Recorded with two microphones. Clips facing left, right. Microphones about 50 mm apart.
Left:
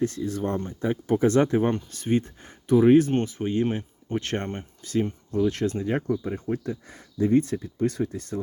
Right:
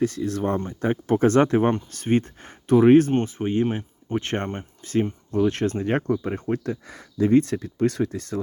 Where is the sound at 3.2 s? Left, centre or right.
Right.